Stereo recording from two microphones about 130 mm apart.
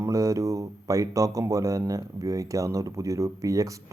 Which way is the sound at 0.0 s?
25° right (ahead or behind).